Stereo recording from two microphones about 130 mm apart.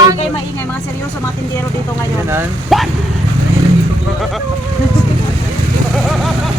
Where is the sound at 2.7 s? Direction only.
Centre (ahead or behind).